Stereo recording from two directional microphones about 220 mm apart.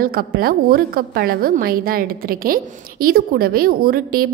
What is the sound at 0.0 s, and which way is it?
A woman's voice, 40° right (ahead or behind).